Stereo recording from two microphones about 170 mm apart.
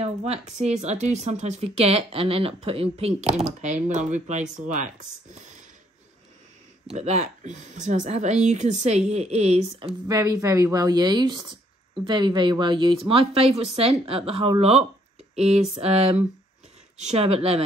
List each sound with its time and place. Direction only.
0.0 s speech: 40° right (ahead or behind)
6.9 s speech: 40° right (ahead or behind)
10.0 s speech: 20° right (ahead or behind)